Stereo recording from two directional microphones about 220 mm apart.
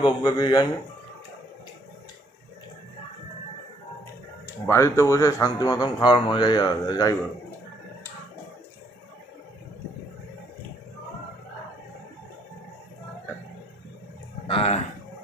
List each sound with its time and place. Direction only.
0.0 s a man's voice: 20° left (ahead or behind)
4.6 s a man's voice: 10° left (ahead or behind)
14.5 s speech: 25° left (ahead or behind)